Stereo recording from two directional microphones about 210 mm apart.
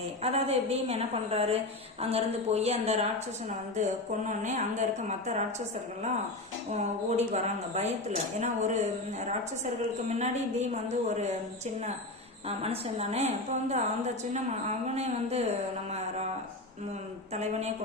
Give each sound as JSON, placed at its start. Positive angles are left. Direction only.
{"t": 0.2, "sound": "a woman's voice", "side_deg": -30}
{"t": 6.7, "sound": "speech", "side_deg": -35}
{"t": 10.2, "sound": "speech", "side_deg": -30}
{"t": 12.5, "sound": "speech", "side_deg": -30}
{"t": 17.3, "sound": "speech", "side_deg": -30}